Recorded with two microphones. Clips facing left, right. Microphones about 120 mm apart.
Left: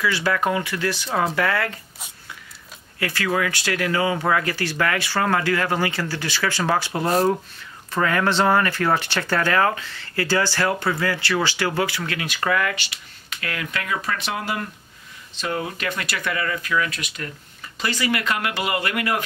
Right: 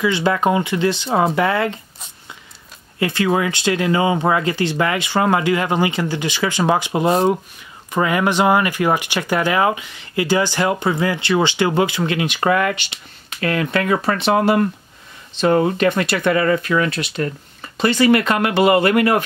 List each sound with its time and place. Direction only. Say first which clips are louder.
0.0 s speech: right 5 dB; 20° right (ahead or behind)
3.0 s speech: right 5 dB; 25° right (ahead or behind)
16.0 s speech: right 9 dB; 25° right (ahead or behind)